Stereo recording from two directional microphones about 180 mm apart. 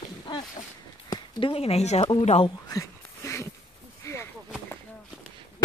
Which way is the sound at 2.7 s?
15° left (ahead or behind).